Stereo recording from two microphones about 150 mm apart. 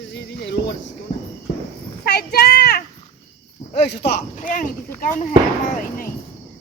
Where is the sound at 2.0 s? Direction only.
90° left.